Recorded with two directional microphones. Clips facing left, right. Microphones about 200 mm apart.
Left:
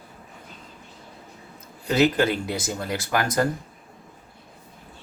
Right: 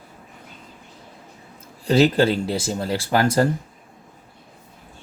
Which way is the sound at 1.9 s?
30° right (ahead or behind).